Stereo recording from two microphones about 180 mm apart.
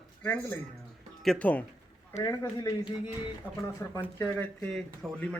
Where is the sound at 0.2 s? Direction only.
10° left (ahead or behind).